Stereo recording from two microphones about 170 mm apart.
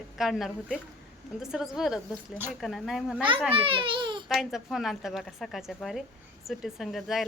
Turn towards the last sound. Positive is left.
turn(degrees=0)  # may be behind; listen again after turning